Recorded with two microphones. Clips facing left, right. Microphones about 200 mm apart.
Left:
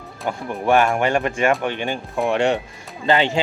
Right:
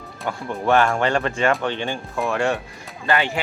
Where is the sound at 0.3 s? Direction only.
15° left (ahead or behind).